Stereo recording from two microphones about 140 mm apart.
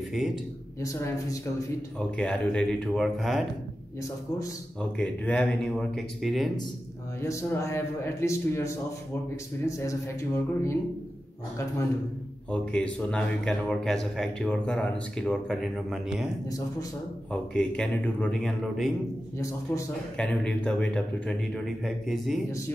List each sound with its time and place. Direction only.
0.7 s speech: 20° left (ahead or behind)
2.0 s a man's voice: 5° left (ahead or behind)
4.9 s a man's voice: 10° left (ahead or behind)
7.2 s speech: 20° left (ahead or behind)
12.4 s a man's voice: 10° left (ahead or behind)
17.3 s a man's voice: 5° left (ahead or behind)
19.3 s speech: 20° left (ahead or behind)
20.2 s a man's voice: 5° left (ahead or behind)